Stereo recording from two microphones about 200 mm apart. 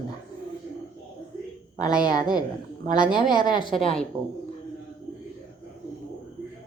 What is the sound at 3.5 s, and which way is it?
Speech, 25° left (ahead or behind).